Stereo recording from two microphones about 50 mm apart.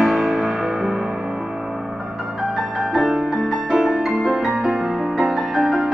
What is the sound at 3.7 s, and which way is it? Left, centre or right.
Music, centre.